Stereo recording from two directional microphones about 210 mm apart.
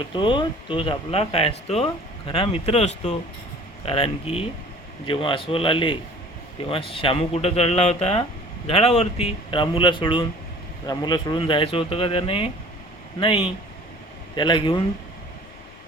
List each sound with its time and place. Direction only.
0.1 s speech: 25° left (ahead or behind)